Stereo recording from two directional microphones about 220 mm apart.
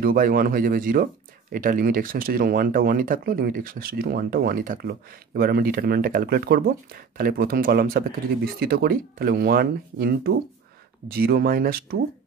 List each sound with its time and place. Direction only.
0.0 s speech: 40° right (ahead or behind)